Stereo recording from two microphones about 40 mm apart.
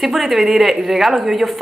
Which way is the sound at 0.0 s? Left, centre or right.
Centre.